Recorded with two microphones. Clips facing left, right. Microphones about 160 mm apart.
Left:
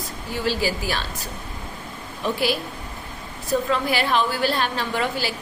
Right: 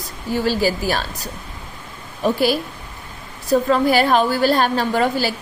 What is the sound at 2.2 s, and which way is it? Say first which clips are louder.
A woman's voice: right 6 dB; 40° right (ahead or behind).